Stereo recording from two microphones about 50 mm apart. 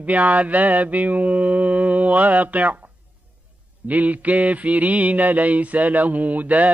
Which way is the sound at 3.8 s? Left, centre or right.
Right.